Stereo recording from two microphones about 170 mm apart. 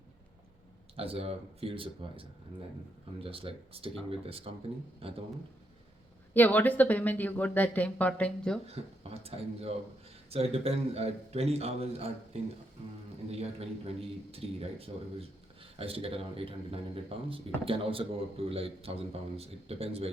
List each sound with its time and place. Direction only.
0.9 s a man's voice: 35° right (ahead or behind)
6.3 s speech: 10° left (ahead or behind)
8.6 s a man's voice: 35° right (ahead or behind)
13.4 s a man's voice: 35° right (ahead or behind)